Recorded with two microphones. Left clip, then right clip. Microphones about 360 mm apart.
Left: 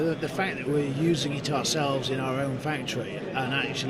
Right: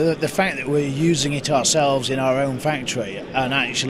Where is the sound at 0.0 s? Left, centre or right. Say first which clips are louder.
Right 8 dB; right.